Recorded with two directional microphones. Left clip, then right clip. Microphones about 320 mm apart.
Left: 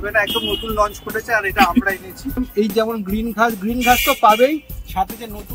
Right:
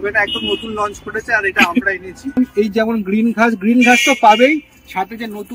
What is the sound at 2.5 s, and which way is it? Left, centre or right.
Speech, centre.